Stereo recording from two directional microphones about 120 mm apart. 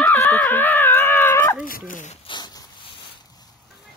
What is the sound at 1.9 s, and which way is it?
Speech, 90° left.